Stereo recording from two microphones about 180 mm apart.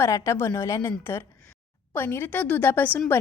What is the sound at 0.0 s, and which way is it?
A woman's voice, 15° left (ahead or behind).